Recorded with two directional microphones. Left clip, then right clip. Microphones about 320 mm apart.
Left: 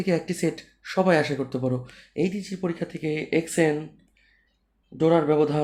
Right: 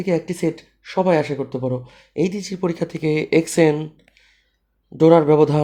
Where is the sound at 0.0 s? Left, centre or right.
Centre.